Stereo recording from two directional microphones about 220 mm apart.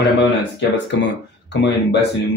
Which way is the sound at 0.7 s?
55° left (ahead or behind).